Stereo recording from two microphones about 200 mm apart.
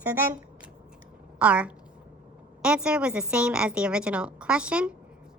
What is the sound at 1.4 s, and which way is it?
A woman's voice, 5° right (ahead or behind).